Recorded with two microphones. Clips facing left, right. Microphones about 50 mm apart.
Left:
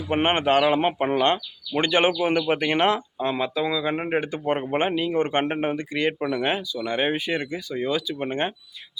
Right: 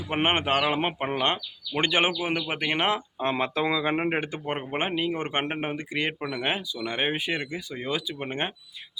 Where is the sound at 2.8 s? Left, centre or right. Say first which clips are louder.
Left 3 dB; centre.